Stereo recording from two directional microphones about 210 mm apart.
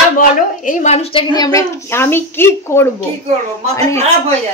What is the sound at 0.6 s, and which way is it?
A woman's voice, 35° left (ahead or behind).